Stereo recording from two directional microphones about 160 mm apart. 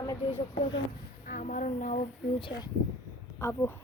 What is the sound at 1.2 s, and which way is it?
Speech, 55° left (ahead or behind).